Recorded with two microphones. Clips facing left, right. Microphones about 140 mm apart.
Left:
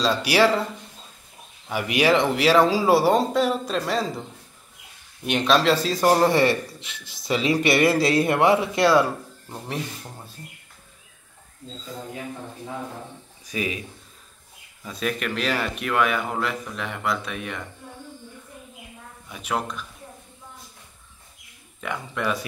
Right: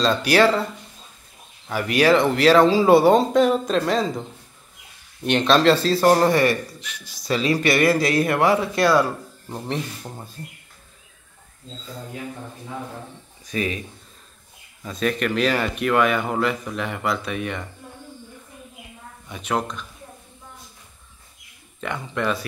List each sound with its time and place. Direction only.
0.0 s speech: 10° left (ahead or behind)
1.7 s speech: 15° left (ahead or behind)
5.2 s speech: 5° left (ahead or behind)
6.3 s speech: 25° left (ahead or behind)
13.5 s speech: 10° left (ahead or behind)
14.8 s speech: 5° left (ahead or behind)
19.2 s speech: 5° left (ahead or behind)
21.8 s speech: 5° left (ahead or behind)